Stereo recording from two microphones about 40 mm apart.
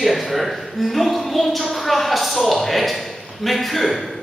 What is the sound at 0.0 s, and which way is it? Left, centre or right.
A man's voice, centre.